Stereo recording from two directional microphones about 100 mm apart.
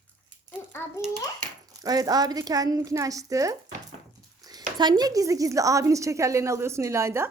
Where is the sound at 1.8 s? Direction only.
40° right (ahead or behind).